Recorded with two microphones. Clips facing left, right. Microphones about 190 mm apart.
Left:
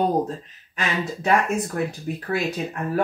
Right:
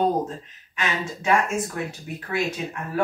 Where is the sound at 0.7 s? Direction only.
35° left (ahead or behind).